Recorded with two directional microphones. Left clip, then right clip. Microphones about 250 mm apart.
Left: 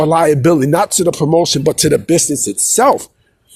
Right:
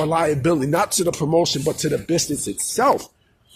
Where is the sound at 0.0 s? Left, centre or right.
Left.